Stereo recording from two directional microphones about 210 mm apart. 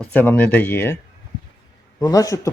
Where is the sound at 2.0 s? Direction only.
15° left (ahead or behind).